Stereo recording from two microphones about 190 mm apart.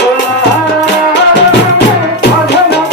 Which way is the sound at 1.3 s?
65° left (ahead or behind).